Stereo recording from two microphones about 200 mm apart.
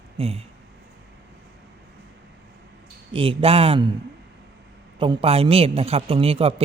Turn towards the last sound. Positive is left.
turn(degrees=-30)  # may be behind; listen again after turning